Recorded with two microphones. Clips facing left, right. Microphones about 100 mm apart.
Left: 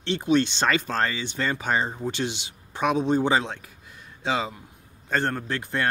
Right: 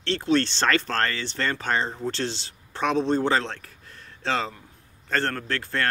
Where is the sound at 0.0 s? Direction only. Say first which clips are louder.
Left 1 dB; 15° left (ahead or behind).